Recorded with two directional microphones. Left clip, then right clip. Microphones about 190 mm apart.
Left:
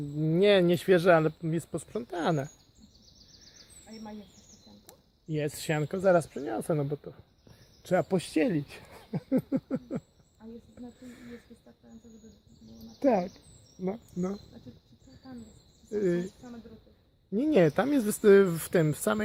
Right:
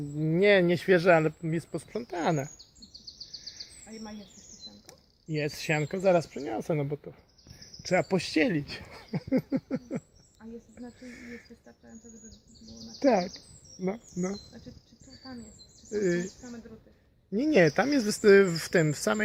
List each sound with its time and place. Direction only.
0.2 s speech: 15° left (ahead or behind)
3.9 s speech: 35° right (ahead or behind)
4.9 s speech: 10° left (ahead or behind)
10.4 s speech: 30° right (ahead or behind)
13.0 s speech: centre (ahead or behind)
15.9 s speech: 10° left (ahead or behind)
17.3 s speech: 10° left (ahead or behind)